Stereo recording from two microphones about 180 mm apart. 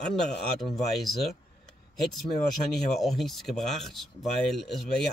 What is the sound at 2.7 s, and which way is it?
Speech, centre (ahead or behind).